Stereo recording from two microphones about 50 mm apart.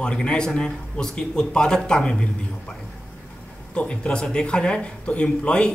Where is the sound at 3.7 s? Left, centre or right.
Left.